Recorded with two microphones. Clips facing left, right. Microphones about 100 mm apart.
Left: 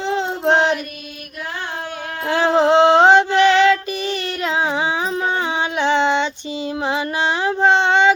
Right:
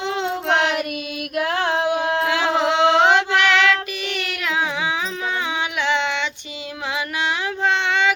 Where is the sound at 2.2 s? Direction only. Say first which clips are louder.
Left 9 dB; 35° left (ahead or behind).